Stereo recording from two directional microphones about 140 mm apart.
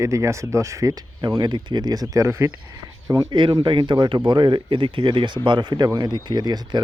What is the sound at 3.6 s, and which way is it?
Speech, 35° right (ahead or behind).